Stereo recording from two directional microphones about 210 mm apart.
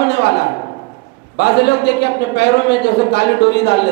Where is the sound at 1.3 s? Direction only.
50° left (ahead or behind).